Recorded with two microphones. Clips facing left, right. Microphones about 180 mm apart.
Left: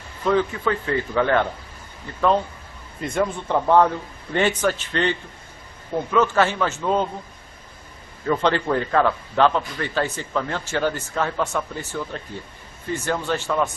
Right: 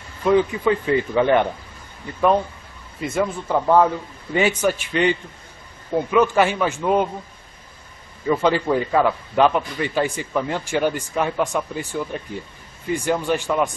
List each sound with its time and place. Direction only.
0.2 s a man's voice: 15° right (ahead or behind)
3.0 s a man's voice: 5° right (ahead or behind)
8.3 s a man's voice: 10° right (ahead or behind)